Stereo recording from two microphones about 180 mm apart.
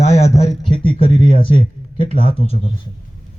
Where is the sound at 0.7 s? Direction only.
30° left (ahead or behind).